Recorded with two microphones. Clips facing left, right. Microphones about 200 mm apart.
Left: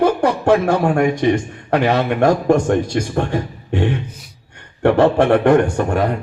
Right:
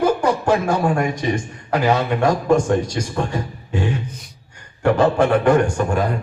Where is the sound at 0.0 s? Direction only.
60° left (ahead or behind).